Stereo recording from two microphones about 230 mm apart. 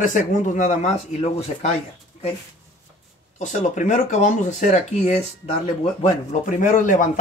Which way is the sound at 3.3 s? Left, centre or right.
Left.